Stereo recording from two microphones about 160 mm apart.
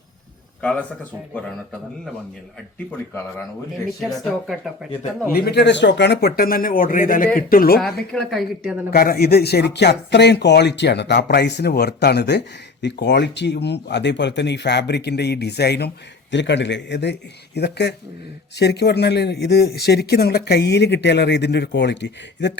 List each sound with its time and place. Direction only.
0.6 s a man's voice: 5° left (ahead or behind)
4.2 s speech: centre (ahead or behind)
5.3 s speech: 80° left; by 7.8 s 65° left (ahead or behind)
8.1 s speech: centre (ahead or behind)
8.9 s speech: 75° left (ahead or behind); by 22.5 s 90° left